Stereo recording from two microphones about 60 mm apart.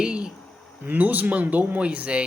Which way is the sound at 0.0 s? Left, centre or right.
Centre.